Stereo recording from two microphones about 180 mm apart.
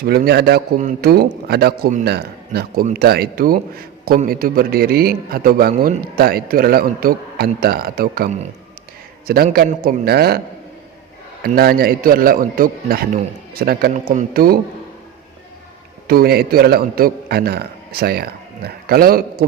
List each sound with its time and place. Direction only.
0.0 s a man's voice: 60° right (ahead or behind)
11.4 s a man's voice: 55° right (ahead or behind)
13.9 s speech: 40° right (ahead or behind)
14.3 s a man's voice: 55° right (ahead or behind)
16.0 s a man's voice: 60° right (ahead or behind)